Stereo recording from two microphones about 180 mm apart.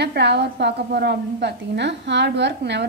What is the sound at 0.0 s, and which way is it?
A woman's voice, 70° right (ahead or behind).